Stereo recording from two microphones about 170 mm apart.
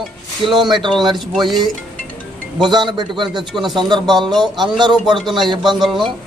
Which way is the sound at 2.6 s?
25° right (ahead or behind).